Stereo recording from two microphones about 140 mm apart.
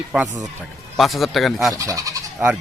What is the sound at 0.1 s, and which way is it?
Speech, 5° right (ahead or behind).